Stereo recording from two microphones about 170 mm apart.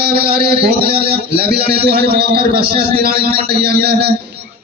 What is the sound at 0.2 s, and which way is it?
A man's voice, 65° right (ahead or behind).